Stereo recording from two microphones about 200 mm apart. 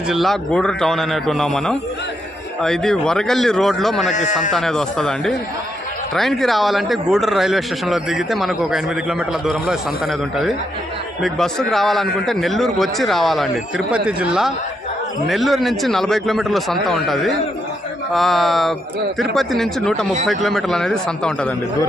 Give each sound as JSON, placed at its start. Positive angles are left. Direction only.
{"t": 0.1, "sound": "speech", "side_deg": 0}
{"t": 4.1, "sound": "speech", "side_deg": 40}
{"t": 4.5, "sound": "speech", "side_deg": 0}